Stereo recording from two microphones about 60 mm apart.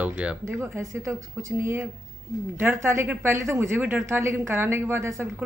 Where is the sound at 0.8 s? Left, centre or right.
Right.